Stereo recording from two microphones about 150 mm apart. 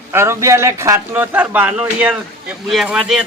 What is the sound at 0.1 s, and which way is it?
Speech, 15° right (ahead or behind).